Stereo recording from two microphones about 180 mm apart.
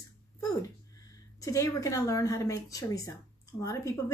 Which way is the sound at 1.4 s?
20° left (ahead or behind).